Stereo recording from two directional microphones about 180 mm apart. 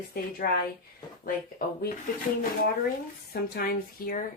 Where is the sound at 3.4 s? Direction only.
55° left (ahead or behind).